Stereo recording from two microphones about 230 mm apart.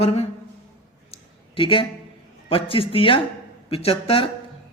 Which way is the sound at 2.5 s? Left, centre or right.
Left.